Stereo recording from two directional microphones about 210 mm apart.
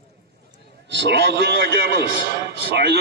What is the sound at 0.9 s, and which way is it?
A man's voice, 55° right (ahead or behind).